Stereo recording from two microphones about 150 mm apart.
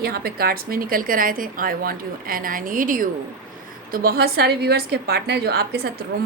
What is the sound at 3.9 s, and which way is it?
A woman's voice, 90° right.